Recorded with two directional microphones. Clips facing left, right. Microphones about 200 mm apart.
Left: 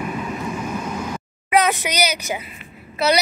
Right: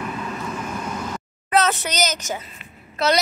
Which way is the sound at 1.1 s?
15° left (ahead or behind).